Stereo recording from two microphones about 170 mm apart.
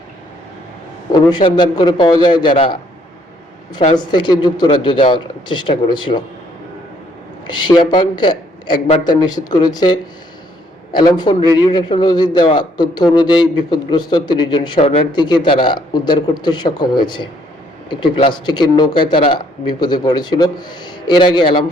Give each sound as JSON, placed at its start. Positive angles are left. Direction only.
{"t": 1.1, "sound": "a man's voice", "side_deg": 25}
{"t": 3.9, "sound": "a man's voice", "side_deg": 25}
{"t": 7.7, "sound": "a man's voice", "side_deg": 25}
{"t": 14.8, "sound": "speech", "side_deg": 35}
{"t": 15.1, "sound": "a man's voice", "side_deg": 25}